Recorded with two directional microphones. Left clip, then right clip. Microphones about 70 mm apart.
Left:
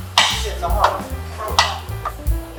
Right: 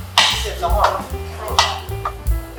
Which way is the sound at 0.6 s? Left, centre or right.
Centre.